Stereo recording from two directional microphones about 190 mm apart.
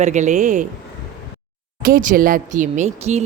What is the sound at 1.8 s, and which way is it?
Speech, 45° right (ahead or behind).